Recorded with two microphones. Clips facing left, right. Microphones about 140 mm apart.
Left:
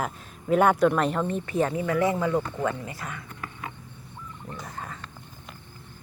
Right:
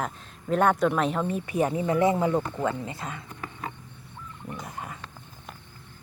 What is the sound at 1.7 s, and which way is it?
Speech, 25° right (ahead or behind).